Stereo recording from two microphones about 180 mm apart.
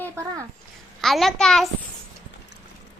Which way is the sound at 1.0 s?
Centre (ahead or behind).